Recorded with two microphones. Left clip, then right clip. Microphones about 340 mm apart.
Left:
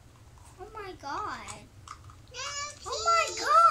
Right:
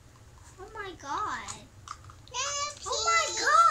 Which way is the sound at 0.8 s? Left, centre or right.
Centre.